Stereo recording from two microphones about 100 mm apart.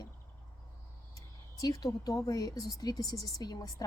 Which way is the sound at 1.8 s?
40° left (ahead or behind).